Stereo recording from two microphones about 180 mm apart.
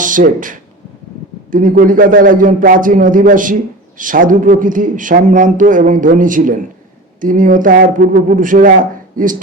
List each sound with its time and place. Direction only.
0.0 s a man's voice: 45° right (ahead or behind)